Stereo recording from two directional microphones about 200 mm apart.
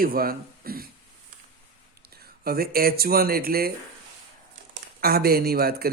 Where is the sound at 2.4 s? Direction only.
50° right (ahead or behind).